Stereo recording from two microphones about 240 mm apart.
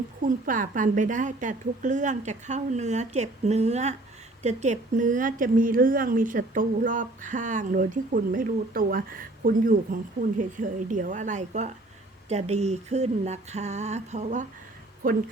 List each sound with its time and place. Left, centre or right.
0.2 s speech: right
12.3 s a sound: right
15.0 s speech: right